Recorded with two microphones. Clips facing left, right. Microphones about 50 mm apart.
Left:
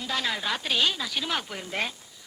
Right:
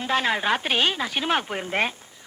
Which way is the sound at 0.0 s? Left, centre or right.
Right.